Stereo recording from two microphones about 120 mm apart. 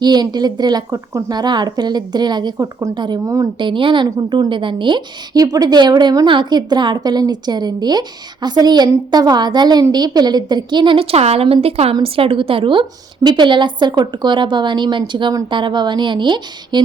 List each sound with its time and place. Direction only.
0.0 s a woman's voice: 35° right (ahead or behind)
3.6 s a woman's voice: 45° right (ahead or behind)